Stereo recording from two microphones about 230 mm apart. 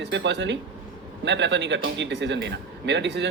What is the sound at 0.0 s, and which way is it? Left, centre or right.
Speech, right.